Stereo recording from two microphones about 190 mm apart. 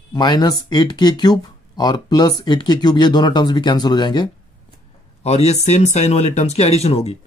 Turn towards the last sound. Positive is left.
turn(degrees=35)  # may be behind; listen again after turning